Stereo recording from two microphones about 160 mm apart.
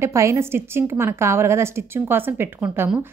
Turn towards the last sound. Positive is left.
turn(degrees=-5)  # may be behind; listen again after turning